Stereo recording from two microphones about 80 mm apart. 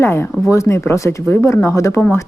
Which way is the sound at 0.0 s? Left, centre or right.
Left.